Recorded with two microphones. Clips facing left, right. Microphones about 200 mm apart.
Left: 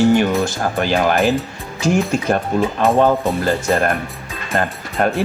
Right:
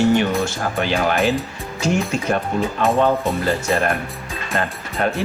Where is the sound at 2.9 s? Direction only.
45° left (ahead or behind).